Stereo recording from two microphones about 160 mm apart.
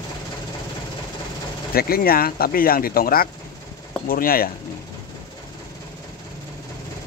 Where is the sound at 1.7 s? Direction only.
70° left (ahead or behind).